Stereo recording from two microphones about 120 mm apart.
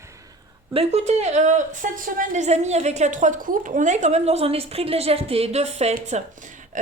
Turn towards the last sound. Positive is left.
turn(degrees=-90)